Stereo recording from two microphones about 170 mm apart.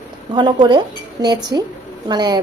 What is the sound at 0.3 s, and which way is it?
A woman's voice, 25° right (ahead or behind).